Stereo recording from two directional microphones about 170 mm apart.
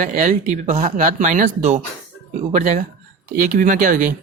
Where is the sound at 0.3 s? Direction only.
45° right (ahead or behind).